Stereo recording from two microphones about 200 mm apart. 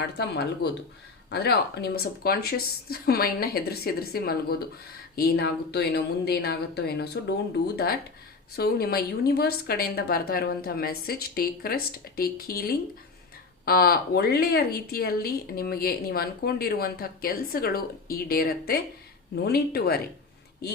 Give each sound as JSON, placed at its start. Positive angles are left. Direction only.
{"t": 0.2, "sound": "speech", "side_deg": 55}
{"t": 8.5, "sound": "speech", "side_deg": 50}